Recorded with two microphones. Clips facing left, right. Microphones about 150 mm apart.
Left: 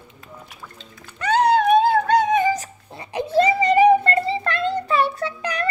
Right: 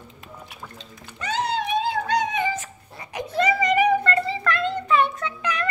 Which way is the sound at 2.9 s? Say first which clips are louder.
Left 8 dB; 30° left (ahead or behind).